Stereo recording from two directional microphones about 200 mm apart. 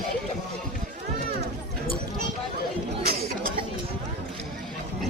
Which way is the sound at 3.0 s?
50° right (ahead or behind).